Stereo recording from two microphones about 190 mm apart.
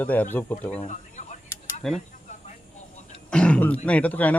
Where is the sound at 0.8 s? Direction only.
40° left (ahead or behind).